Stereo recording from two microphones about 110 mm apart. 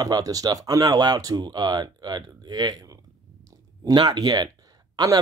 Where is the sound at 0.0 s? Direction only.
35° right (ahead or behind).